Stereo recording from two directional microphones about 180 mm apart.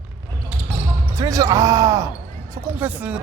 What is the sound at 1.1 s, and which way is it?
Speech, 20° right (ahead or behind).